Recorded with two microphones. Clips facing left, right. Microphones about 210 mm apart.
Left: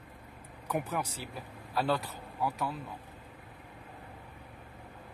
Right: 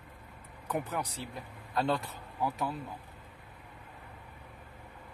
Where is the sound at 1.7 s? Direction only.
5° left (ahead or behind).